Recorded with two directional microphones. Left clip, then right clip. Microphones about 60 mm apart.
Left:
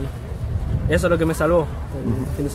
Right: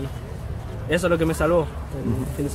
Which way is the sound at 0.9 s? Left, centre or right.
Centre.